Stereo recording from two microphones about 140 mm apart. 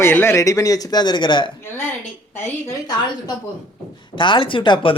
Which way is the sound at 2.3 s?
15° left (ahead or behind).